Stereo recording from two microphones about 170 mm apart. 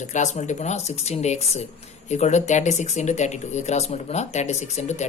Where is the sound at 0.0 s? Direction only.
45° left (ahead or behind).